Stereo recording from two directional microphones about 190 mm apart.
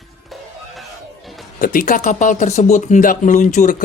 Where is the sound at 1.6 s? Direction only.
45° left (ahead or behind).